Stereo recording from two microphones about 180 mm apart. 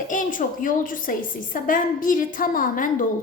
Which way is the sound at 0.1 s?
45° left (ahead or behind).